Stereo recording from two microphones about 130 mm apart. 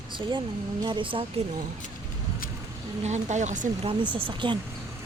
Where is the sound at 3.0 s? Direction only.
65° right (ahead or behind).